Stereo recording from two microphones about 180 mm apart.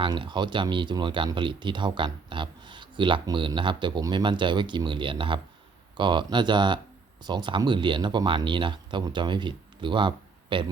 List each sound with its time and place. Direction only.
0.0 s speech: 25° right (ahead or behind)